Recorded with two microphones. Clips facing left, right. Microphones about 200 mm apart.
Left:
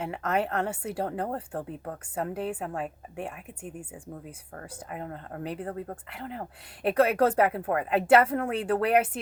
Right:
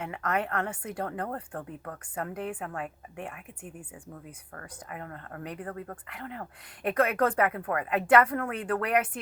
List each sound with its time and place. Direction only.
0.0 s speech: 30° left (ahead or behind)